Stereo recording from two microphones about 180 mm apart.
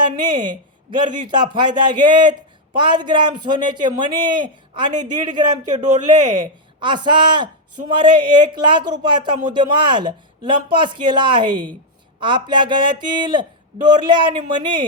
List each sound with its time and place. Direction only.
0.0 s speech: 25° right (ahead or behind)
5.7 s speech: 40° right (ahead or behind)
6.4 s speech: 25° right (ahead or behind)